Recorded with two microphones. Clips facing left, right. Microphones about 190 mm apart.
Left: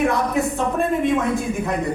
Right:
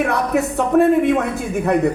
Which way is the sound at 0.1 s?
65° right (ahead or behind).